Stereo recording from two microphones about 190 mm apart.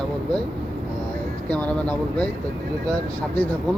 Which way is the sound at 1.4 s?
5° left (ahead or behind).